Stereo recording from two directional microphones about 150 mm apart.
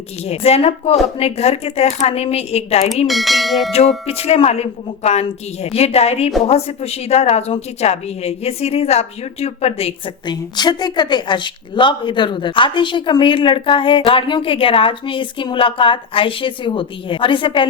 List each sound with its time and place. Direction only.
0.3 s a woman's voice: 45° left (ahead or behind)
3.1 s bell: centre (ahead or behind)
4.0 s a woman's voice: 45° left (ahead or behind)
10.2 s a woman's voice: 30° left (ahead or behind)